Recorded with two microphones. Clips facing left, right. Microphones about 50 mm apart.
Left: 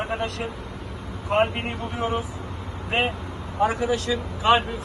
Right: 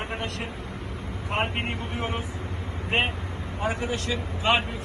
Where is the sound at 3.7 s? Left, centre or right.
Right.